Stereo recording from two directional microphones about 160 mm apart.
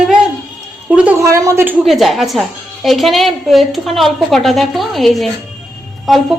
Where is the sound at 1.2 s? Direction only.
20° right (ahead or behind).